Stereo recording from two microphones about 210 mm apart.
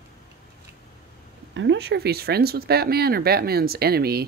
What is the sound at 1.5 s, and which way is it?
Speech, 60° right (ahead or behind).